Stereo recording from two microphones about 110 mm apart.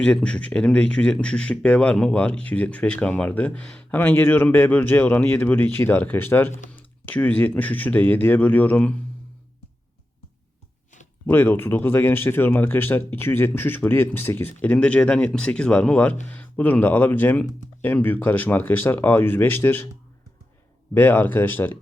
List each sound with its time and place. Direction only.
0.0 s speech: 10° left (ahead or behind)
11.3 s speech: 20° left (ahead or behind)
20.9 s speech: 20° left (ahead or behind)